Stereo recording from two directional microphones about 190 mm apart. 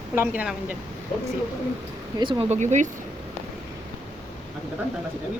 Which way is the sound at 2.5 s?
40° right (ahead or behind).